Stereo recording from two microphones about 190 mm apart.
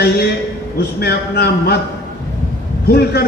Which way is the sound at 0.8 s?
55° left (ahead or behind).